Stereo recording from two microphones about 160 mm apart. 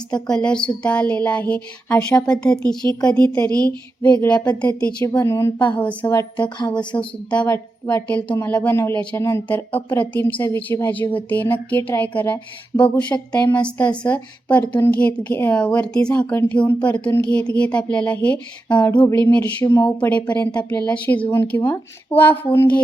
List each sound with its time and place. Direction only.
0.1 s a woman's voice: 5° left (ahead or behind)
4.9 s a woman's voice: 20° left (ahead or behind)
6.1 s speech: 25° left (ahead or behind)
6.7 s a woman's voice: 10° left (ahead or behind)
20.0 s a woman's voice: 10° left (ahead or behind)